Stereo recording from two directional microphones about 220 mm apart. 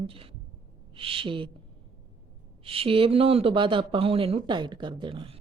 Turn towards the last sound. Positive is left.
turn(degrees=-25)  # may be behind; listen again after turning